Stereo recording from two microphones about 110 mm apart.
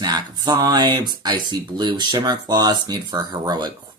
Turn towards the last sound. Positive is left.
turn(degrees=-35)  # may be behind; listen again after turning